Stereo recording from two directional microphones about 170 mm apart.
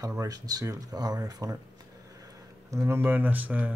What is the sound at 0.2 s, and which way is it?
Speech, 20° right (ahead or behind).